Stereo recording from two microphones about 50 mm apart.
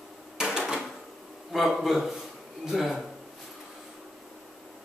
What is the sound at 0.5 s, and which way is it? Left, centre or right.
Drawer open or close, centre.